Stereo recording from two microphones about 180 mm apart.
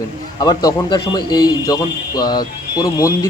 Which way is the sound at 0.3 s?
25° left (ahead or behind).